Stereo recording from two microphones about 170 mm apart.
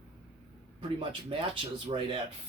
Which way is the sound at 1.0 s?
30° right (ahead or behind).